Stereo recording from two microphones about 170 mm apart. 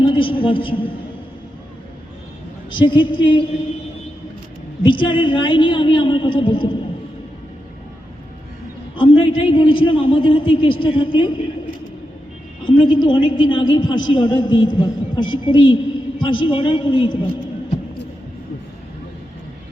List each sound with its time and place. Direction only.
0.0 s a woman's voice: 30° left (ahead or behind)
2.6 s a woman's voice: 30° left (ahead or behind)
4.9 s a woman's voice: 30° left (ahead or behind)
9.0 s a man's voice: 30° left (ahead or behind)
12.6 s a woman's voice: 30° left (ahead or behind)